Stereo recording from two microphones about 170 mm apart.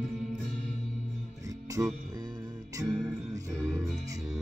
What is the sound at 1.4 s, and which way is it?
Music, 20° right (ahead or behind).